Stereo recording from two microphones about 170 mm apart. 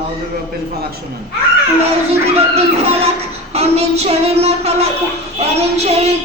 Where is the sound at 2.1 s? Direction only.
35° right (ahead or behind).